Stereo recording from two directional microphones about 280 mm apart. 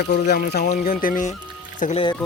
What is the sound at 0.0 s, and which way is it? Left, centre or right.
Speech, left.